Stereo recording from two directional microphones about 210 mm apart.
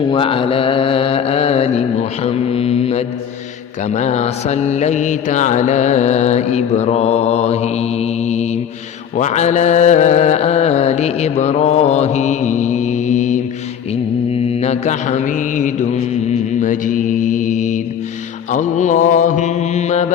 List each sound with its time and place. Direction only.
0.1 s mantra: 25° left (ahead or behind)